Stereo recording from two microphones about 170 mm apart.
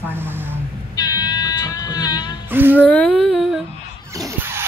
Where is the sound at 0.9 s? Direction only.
25° left (ahead or behind).